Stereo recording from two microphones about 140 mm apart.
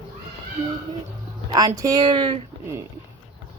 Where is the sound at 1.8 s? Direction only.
25° right (ahead or behind).